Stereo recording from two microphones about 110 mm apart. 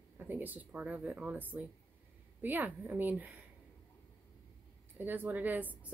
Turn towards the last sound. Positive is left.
turn(degrees=-15)  # may be behind; listen again after turning